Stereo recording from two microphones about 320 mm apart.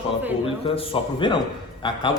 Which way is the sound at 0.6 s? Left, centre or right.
Centre.